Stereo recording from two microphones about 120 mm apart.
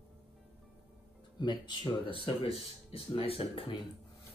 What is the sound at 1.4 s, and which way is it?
Speech, 40° left (ahead or behind).